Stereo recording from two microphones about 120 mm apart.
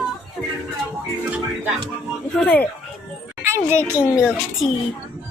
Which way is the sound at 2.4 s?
10° left (ahead or behind).